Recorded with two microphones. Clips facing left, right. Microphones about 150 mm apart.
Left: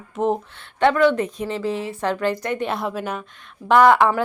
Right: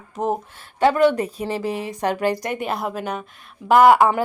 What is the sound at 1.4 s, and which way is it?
Speech, 15° right (ahead or behind).